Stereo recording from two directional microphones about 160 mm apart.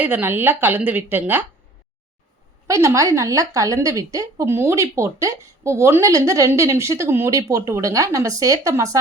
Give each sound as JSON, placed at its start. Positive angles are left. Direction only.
{"t": 0.0, "sound": "a woman's voice", "side_deg": -10}
{"t": 2.6, "sound": "a woman's voice", "side_deg": -20}